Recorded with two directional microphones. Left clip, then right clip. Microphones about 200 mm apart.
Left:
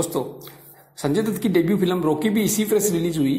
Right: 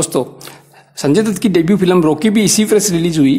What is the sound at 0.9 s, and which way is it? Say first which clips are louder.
A man's voice: right 9 dB; 25° right (ahead or behind).